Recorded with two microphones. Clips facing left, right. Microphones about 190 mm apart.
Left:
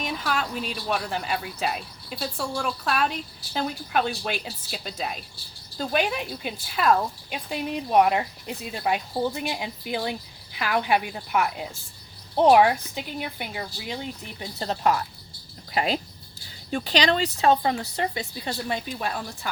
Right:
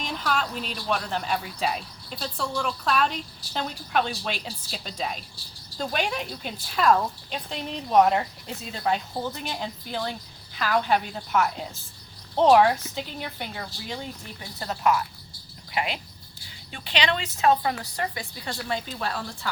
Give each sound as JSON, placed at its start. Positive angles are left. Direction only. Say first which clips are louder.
{"t": 0.0, "sound": "a woman's voice", "louder": "even", "side_deg": 5}
{"t": 14.6, "sound": "a woman's voice", "louder": "even", "side_deg": 30}